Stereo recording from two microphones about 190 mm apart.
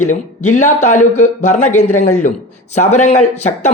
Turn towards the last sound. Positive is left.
turn(degrees=35)  # may be behind; listen again after turning